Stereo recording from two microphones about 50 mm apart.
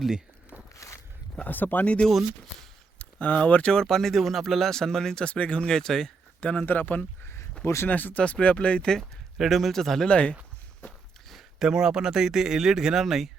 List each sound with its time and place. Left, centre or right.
0.7 s walk: left
1.5 s speech: left
1.8 s speech: left
2.0 s speech: centre
3.0 s speech: left; by 5.2 s centre
5.2 s speech: left
6.4 s speech: left
6.7 s speech: left
9.4 s speech: centre
10.1 s speech: left
11.3 s a sound: centre
11.7 s speech: centre